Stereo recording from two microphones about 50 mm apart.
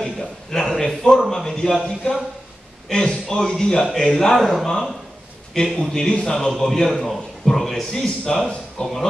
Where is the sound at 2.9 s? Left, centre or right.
Centre.